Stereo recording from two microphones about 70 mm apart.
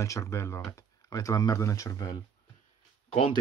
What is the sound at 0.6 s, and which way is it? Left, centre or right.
Speech, left.